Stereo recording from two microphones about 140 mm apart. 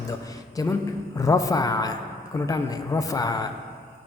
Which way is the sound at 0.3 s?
25° left (ahead or behind).